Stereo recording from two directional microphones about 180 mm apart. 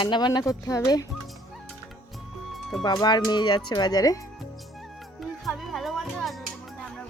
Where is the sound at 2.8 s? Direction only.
25° left (ahead or behind).